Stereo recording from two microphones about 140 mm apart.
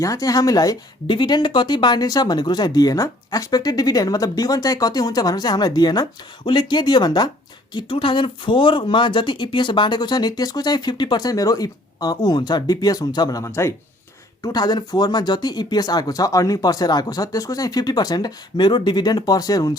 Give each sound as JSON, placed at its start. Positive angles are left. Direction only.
{"t": 0.0, "sound": "speech", "side_deg": 25}